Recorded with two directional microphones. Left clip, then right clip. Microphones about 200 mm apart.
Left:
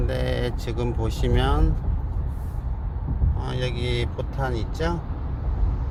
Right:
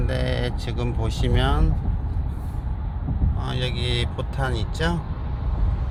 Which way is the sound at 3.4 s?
Centre (ahead or behind).